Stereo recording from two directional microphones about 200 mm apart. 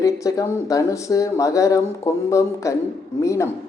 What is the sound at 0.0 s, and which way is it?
Speech, 15° left (ahead or behind).